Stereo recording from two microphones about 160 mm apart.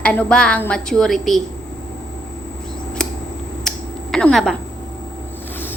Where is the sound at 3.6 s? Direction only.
5° left (ahead or behind).